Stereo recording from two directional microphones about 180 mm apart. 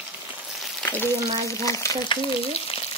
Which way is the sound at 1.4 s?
15° left (ahead or behind).